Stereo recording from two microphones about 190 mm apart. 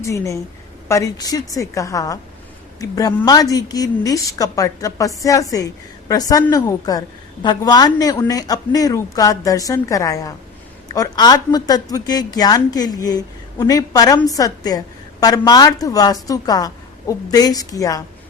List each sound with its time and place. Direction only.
0.0 s a woman's voice: 15° left (ahead or behind)